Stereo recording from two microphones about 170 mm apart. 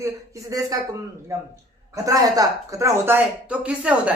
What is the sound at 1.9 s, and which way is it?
Speech, 20° right (ahead or behind).